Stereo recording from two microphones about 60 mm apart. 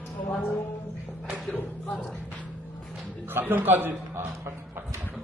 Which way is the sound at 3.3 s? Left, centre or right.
Right.